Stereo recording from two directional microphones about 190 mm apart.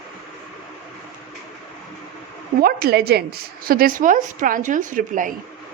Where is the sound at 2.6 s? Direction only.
50° right (ahead or behind).